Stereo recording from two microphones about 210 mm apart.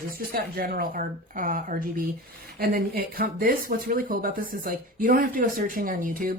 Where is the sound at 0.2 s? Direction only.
45° right (ahead or behind).